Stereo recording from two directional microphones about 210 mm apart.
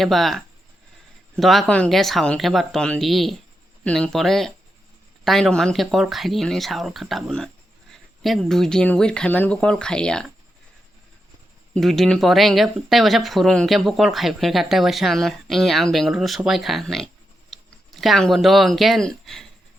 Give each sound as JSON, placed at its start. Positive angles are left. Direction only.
{"t": 0.0, "sound": "speech", "side_deg": 0}
{"t": 11.7, "sound": "speech", "side_deg": 0}